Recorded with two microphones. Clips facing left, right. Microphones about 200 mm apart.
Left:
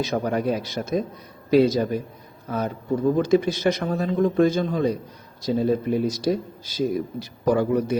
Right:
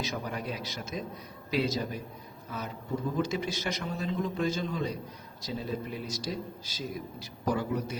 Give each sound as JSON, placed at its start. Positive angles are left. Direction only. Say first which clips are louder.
{"t": 0.1, "sound": "a man's voice", "louder": "left 12 dB", "side_deg": 55}